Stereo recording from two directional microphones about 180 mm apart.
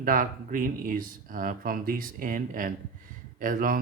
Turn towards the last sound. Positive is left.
turn(degrees=-50)  # may be behind; listen again after turning